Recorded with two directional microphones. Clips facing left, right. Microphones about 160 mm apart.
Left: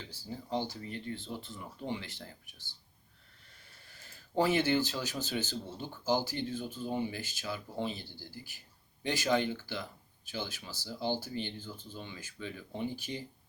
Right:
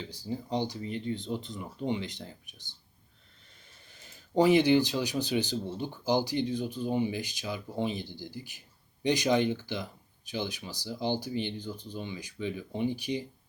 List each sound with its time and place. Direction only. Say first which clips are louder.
0.0 s speech: right 7 dB; 15° right (ahead or behind)
3.8 s speech: right 2 dB; 20° right (ahead or behind)